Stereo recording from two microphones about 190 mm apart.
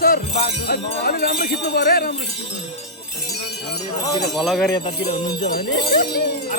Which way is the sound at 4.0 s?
20° left (ahead or behind).